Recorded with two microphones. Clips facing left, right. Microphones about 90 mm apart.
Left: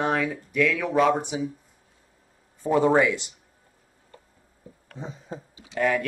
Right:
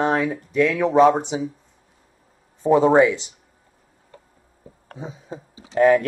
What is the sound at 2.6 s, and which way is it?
Speech, 20° right (ahead or behind).